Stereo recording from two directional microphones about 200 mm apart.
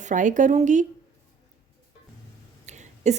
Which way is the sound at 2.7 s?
35° right (ahead or behind).